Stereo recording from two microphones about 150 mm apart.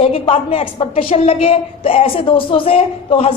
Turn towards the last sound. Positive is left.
turn(degrees=40)  # may be behind; listen again after turning